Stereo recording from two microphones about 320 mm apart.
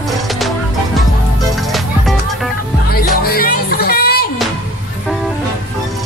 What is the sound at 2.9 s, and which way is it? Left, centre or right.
Music, left.